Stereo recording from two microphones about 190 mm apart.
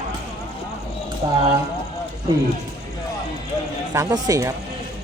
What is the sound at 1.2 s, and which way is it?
Speech, 20° right (ahead or behind).